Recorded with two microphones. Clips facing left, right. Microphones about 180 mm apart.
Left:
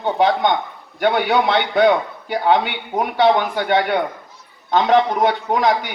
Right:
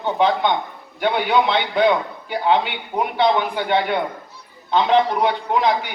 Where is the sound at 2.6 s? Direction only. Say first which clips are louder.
Left 1 dB; 45° left (ahead or behind).